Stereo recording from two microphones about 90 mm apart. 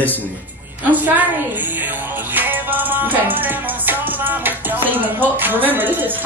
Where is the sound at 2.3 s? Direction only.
20° right (ahead or behind).